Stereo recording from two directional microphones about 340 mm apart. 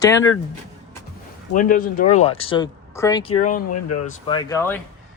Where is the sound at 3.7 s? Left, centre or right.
Left.